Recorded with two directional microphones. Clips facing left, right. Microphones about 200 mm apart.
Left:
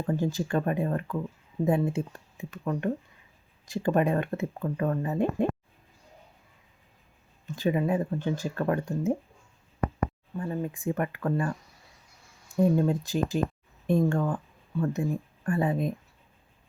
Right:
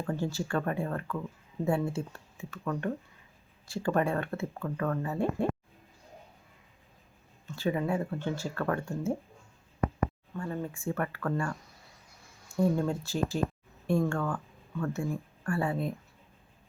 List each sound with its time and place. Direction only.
0.0 s speech: 20° left (ahead or behind)
7.4 s speech: 15° left (ahead or behind)
10.3 s speech: 20° left (ahead or behind)
12.5 s speech: 20° left (ahead or behind)